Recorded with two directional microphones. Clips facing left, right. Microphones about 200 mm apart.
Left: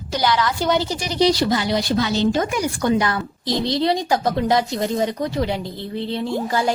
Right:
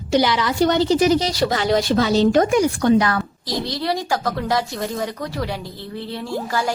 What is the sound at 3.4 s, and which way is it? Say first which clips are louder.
Speech: left 4 dB; 25° left (ahead or behind).